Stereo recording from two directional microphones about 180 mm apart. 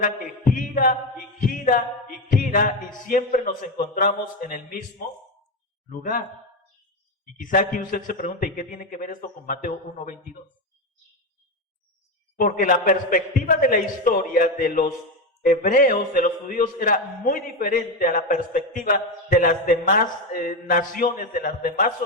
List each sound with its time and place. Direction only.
0.5 s a capella: 50° left (ahead or behind)
3.1 s a man's voice: 50° left (ahead or behind)
7.3 s a man's voice: 50° left (ahead or behind)
12.4 s a man's voice: 50° left (ahead or behind)